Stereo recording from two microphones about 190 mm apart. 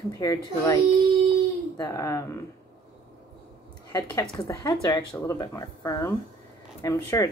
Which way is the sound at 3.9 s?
20° left (ahead or behind).